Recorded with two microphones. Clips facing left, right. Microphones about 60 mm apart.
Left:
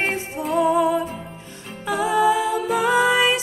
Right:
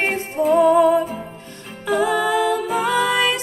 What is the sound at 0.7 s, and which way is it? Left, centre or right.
Music, right.